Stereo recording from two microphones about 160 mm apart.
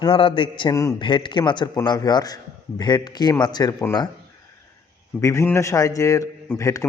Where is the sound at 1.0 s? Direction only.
30° left (ahead or behind).